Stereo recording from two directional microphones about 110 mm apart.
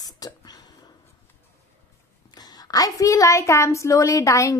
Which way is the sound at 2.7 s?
30° left (ahead or behind).